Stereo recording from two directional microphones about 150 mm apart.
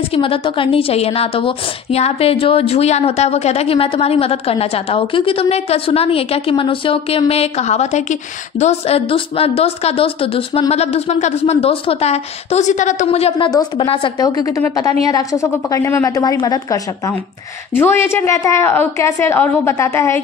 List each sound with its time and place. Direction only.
0.1 s a woman's voice: 35° left (ahead or behind)
13.5 s a woman's voice: 25° left (ahead or behind)